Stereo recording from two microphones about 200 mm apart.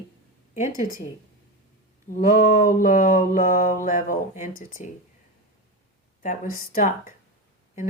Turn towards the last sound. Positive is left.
turn(degrees=40)  # may be behind; listen again after turning